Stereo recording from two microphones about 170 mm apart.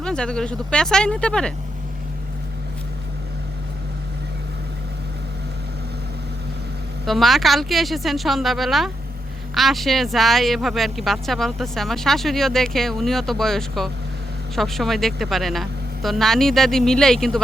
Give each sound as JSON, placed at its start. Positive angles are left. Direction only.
{"t": 0.0, "sound": "speech", "side_deg": 5}
{"t": 7.0, "sound": "speech", "side_deg": 0}